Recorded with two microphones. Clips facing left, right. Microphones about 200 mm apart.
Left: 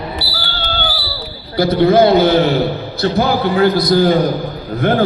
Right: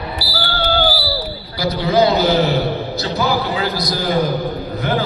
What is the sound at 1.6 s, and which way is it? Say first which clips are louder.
A man's voice: left 5 dB; 55° left (ahead or behind).